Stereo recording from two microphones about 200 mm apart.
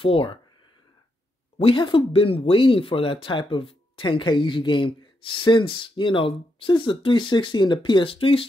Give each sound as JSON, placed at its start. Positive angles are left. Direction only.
{"t": 0.0, "sound": "speech", "side_deg": 25}
{"t": 1.6, "sound": "speech", "side_deg": 25}